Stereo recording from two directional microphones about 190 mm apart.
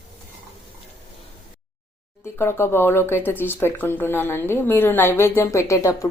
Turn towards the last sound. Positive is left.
turn(degrees=15)  # may be behind; listen again after turning